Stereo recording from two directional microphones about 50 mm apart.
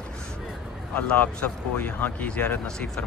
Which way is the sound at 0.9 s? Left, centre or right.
Left.